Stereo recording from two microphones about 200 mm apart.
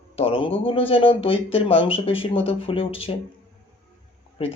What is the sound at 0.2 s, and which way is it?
Speech, 25° left (ahead or behind).